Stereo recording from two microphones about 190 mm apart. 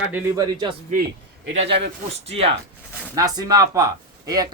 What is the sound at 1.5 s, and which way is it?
Speech, 30° right (ahead or behind).